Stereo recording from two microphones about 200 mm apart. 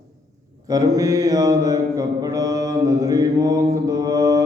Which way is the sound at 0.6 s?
15° right (ahead or behind).